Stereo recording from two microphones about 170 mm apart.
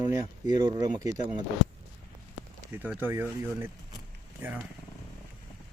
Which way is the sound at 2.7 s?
10° right (ahead or behind).